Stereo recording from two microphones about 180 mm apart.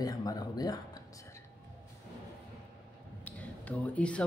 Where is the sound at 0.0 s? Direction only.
20° left (ahead or behind).